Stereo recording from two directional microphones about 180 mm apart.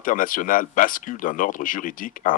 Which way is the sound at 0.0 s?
50° left (ahead or behind).